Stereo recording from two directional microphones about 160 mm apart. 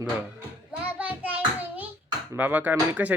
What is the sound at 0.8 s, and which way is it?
Child singing, 10° right (ahead or behind).